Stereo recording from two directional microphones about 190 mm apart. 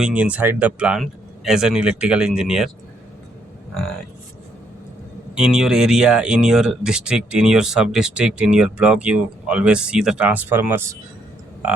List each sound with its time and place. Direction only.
0.0 s speech: 5° right (ahead or behind)
5.3 s speech: 5° right (ahead or behind)